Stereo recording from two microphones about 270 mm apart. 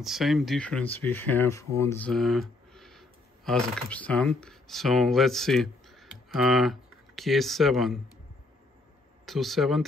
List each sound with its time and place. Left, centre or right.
0.0 s speech: centre
9.2 s speech: centre